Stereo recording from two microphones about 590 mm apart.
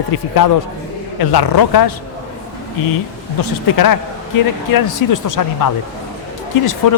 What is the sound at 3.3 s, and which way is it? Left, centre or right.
Speech, left.